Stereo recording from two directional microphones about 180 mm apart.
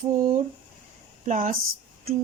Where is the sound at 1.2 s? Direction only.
45° right (ahead or behind).